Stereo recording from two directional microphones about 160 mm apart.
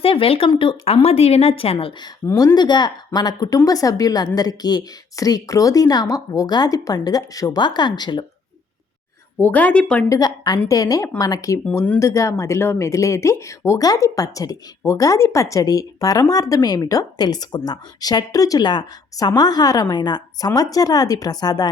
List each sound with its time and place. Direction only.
0.0 s speech: 35° left (ahead or behind)
2.2 s speech: 20° left (ahead or behind)
9.4 s speech: 10° left (ahead or behind)
10.1 s speech: 25° left (ahead or behind)